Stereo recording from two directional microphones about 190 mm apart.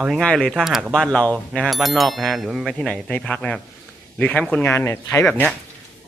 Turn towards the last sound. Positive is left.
turn(degrees=5)  # may be behind; listen again after turning